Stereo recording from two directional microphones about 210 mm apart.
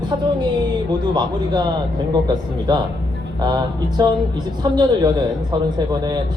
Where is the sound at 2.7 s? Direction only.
20° right (ahead or behind).